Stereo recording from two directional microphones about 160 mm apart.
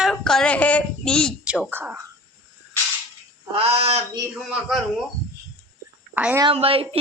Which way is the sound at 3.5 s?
40° right (ahead or behind).